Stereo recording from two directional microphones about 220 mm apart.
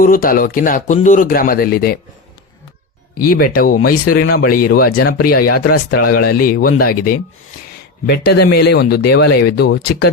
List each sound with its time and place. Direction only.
0.0 s a man's voice: 40° left (ahead or behind)
3.2 s a man's voice: 40° left (ahead or behind)